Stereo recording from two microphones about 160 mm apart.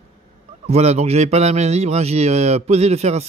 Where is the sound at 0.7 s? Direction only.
40° right (ahead or behind).